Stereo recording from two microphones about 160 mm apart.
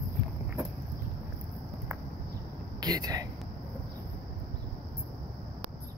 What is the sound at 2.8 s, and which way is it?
Speech, 25° right (ahead or behind).